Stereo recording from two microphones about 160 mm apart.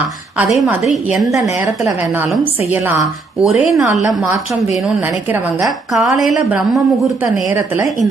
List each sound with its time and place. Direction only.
0.3 s a woman's voice: centre (ahead or behind)
2.4 s a woman's voice: 10° right (ahead or behind)
3.4 s a woman's voice: centre (ahead or behind)
5.6 s a woman's voice: centre (ahead or behind)
7.5 s a woman's voice: 20° right (ahead or behind)